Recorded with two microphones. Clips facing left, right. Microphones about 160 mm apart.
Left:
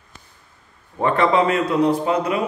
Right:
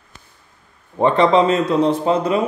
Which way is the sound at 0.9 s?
20° right (ahead or behind).